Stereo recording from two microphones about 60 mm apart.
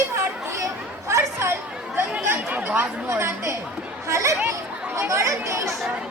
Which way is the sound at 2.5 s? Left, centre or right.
Right.